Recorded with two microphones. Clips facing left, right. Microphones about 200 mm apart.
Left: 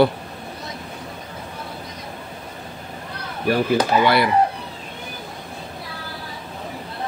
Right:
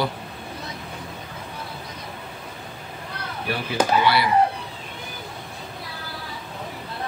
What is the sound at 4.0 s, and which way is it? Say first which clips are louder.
Speech: left 3 dB; 50° left (ahead or behind).